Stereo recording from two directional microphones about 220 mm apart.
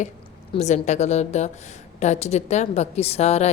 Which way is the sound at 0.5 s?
30° left (ahead or behind).